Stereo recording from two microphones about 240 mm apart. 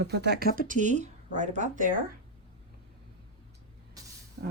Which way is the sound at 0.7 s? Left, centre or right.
Right.